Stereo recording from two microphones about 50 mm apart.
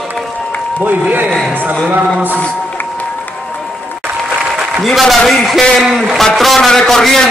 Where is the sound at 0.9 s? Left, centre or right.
Right.